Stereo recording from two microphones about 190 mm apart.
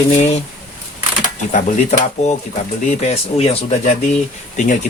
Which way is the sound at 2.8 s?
35° left (ahead or behind).